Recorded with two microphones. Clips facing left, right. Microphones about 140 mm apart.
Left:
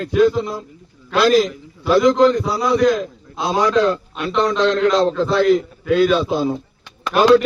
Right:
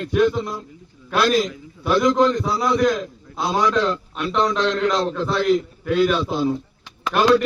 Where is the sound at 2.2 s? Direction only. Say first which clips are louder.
Left 3 dB; 5° left (ahead or behind).